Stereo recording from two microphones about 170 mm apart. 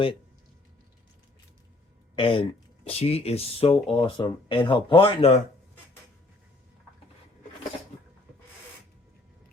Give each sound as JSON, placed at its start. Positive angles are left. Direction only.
{"t": 2.1, "sound": "speech", "side_deg": 30}